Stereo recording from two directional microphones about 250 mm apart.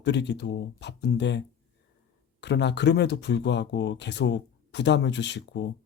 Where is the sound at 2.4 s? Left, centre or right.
Left.